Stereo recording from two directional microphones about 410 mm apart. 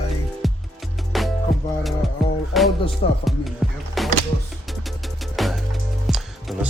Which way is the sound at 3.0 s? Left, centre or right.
Centre.